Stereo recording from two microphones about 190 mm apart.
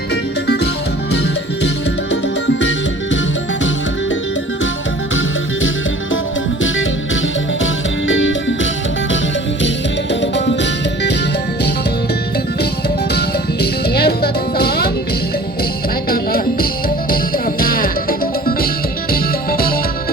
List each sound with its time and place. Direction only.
0.1 s music: 60° left (ahead or behind)
2.5 s music: 70° left (ahead or behind)
7.6 s music: 85° left
10.1 s music: 70° left (ahead or behind)
13.1 s music: 55° left (ahead or behind)
16.0 s music: 50° left (ahead or behind)
19.1 s music: 50° left (ahead or behind)